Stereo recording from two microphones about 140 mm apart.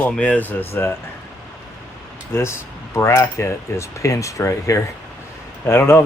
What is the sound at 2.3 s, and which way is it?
Speech, 20° left (ahead or behind).